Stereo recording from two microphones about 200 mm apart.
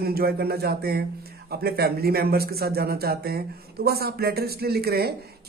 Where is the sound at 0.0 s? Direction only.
50° right (ahead or behind).